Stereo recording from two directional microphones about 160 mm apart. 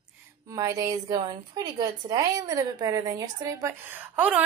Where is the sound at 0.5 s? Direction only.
20° right (ahead or behind).